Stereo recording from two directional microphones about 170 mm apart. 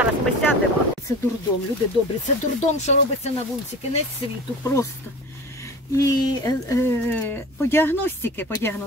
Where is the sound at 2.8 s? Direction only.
40° left (ahead or behind).